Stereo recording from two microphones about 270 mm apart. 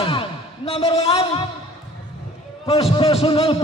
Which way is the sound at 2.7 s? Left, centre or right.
Left.